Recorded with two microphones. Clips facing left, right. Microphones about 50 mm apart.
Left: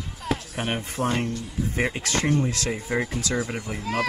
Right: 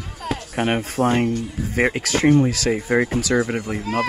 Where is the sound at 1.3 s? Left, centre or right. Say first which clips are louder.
Right 5 dB; right.